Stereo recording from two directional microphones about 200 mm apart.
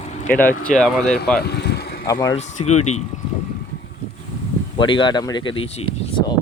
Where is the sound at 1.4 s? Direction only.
55° left (ahead or behind).